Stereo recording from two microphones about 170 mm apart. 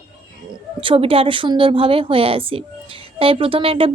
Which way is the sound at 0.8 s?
30° right (ahead or behind).